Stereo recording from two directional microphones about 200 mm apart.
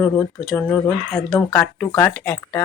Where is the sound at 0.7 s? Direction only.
10° left (ahead or behind).